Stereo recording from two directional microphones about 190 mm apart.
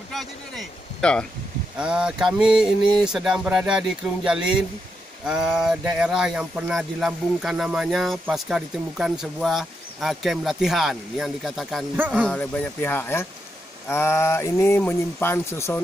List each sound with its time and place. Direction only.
0.1 s speech: centre (ahead or behind)